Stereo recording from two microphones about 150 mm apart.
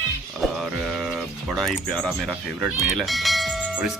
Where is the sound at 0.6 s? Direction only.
Centre (ahead or behind).